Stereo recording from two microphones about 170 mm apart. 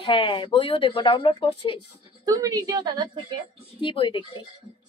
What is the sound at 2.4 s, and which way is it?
Speech, 20° right (ahead or behind).